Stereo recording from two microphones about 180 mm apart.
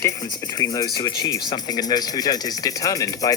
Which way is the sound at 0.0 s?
20° left (ahead or behind).